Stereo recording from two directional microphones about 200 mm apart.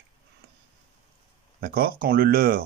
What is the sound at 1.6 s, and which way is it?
Speech, 50° right (ahead or behind).